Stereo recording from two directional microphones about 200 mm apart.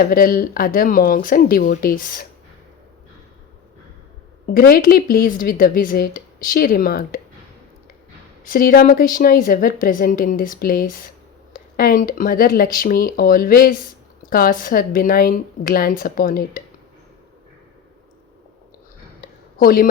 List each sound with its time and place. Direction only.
0.0 s a woman's voice: 45° left (ahead or behind)
4.5 s a woman's voice: 45° left (ahead or behind)
8.4 s a woman's voice: 45° left (ahead or behind)
19.5 s speech: 45° left (ahead or behind)